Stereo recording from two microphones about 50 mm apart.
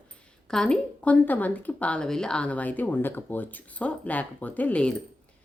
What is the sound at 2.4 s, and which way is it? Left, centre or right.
Speech, left.